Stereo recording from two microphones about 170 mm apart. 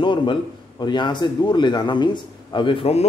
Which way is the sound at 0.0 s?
30° left (ahead or behind).